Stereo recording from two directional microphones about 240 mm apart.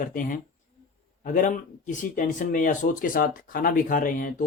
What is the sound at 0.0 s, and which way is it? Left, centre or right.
Speech, left.